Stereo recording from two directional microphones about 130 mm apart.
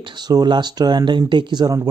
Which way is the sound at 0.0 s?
35° right (ahead or behind).